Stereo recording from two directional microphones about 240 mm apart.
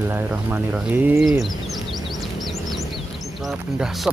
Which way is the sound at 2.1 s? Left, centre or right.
Centre.